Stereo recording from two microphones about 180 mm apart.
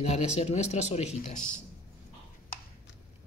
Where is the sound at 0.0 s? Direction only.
35° left (ahead or behind).